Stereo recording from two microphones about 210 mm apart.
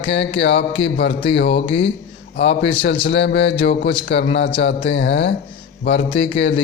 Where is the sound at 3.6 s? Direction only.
55° left (ahead or behind).